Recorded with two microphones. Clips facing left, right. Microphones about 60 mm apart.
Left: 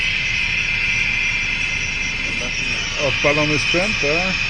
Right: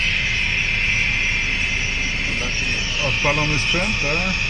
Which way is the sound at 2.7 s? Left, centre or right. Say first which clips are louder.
Left 2 dB; left.